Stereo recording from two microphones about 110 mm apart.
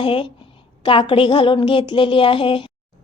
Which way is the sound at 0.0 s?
55° left (ahead or behind).